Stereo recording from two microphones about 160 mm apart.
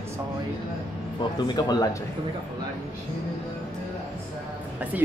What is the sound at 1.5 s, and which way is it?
Speech, 25° left (ahead or behind).